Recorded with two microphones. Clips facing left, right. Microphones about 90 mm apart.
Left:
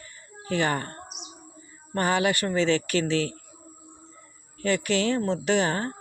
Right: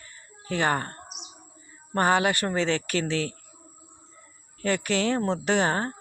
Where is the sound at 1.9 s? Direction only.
30° right (ahead or behind).